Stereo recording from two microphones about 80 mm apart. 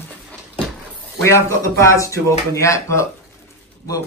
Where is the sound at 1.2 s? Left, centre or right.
Left.